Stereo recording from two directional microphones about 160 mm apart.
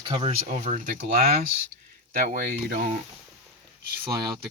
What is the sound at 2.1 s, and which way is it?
Speech, 65° right (ahead or behind).